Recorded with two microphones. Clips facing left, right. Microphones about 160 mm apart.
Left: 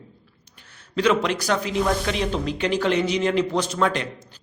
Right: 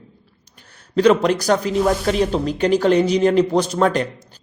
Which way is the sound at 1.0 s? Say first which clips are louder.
Right 6 dB; 40° right (ahead or behind).